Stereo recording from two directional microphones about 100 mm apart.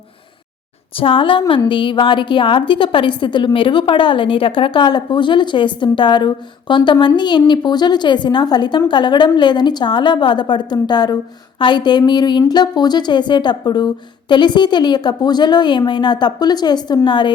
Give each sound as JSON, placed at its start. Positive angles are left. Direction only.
{"t": 0.9, "sound": "a woman's voice", "side_deg": 65}